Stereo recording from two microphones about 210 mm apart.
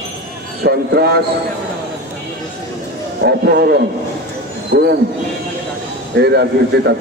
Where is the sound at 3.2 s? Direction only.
50° right (ahead or behind).